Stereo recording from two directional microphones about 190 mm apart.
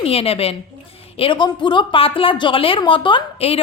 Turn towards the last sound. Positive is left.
turn(degrees=30)  # may be behind; listen again after turning